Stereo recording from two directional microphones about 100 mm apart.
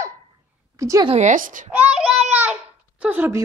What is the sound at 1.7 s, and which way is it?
Child singing, 15° right (ahead or behind).